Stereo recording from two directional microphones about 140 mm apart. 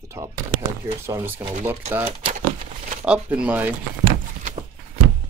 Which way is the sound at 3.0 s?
10° right (ahead or behind).